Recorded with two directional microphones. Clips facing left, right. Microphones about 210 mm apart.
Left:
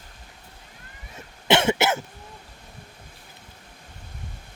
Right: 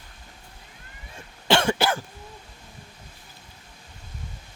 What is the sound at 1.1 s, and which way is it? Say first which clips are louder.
Cough: left 1 dB; 20° left (ahead or behind).